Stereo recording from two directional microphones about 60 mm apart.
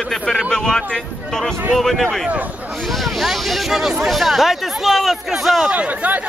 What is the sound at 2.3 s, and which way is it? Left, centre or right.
Speech, right.